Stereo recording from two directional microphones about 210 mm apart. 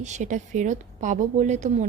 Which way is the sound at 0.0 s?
35° right (ahead or behind).